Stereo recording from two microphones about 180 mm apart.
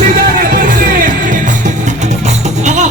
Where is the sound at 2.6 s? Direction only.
40° right (ahead or behind).